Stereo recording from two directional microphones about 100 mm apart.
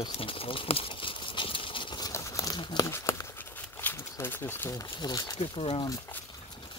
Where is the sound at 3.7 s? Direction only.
25° left (ahead or behind).